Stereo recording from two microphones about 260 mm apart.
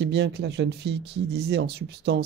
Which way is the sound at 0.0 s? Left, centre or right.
Right.